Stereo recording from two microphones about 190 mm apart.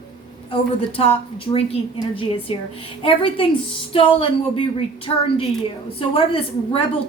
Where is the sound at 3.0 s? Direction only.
30° left (ahead or behind).